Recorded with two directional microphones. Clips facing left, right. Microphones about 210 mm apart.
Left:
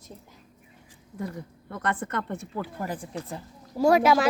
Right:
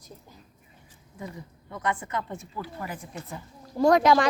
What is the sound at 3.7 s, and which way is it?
Speech, 5° left (ahead or behind).